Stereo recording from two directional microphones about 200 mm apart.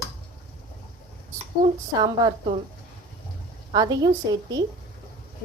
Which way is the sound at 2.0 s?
20° right (ahead or behind).